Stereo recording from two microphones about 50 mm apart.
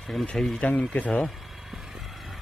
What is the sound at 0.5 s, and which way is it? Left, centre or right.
Speech, left.